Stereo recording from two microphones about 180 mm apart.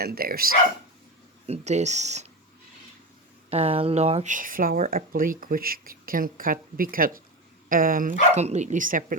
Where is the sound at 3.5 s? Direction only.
35° right (ahead or behind).